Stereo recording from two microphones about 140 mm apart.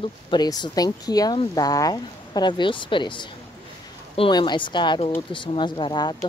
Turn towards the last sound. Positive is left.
turn(degrees=30)  # may be behind; listen again after turning